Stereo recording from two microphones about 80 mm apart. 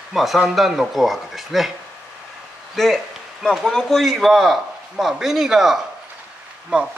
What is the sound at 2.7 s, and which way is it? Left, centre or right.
A man's voice, centre.